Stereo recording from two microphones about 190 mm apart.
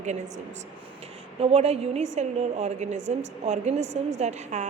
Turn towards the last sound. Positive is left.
turn(degrees=-35)  # may be behind; listen again after turning